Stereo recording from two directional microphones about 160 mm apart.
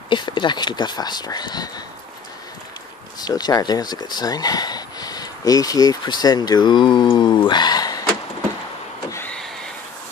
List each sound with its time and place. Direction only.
0.1 s speech: 30° left (ahead or behind)
3.2 s speech: 25° left (ahead or behind)
9.1 s power windows: 10° left (ahead or behind)